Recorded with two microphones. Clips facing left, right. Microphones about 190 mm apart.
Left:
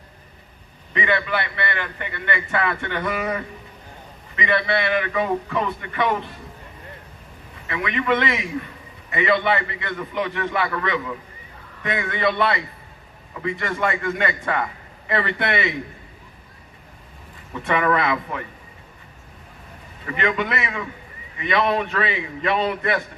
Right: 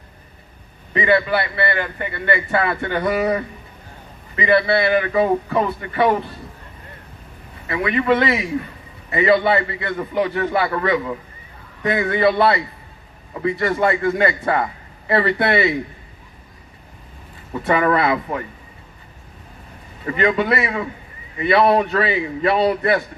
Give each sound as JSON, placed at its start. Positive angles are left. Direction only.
{"t": 0.9, "sound": "a man's voice", "side_deg": -35}
{"t": 7.7, "sound": "a man's voice", "side_deg": -35}
{"t": 17.5, "sound": "a man's voice", "side_deg": -35}
{"t": 20.1, "sound": "a man's voice", "side_deg": -35}